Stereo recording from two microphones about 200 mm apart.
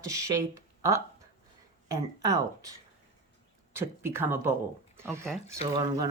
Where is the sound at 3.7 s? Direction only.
10° right (ahead or behind).